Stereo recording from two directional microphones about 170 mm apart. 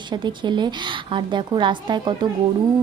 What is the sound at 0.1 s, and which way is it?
A woman's voice, 25° right (ahead or behind).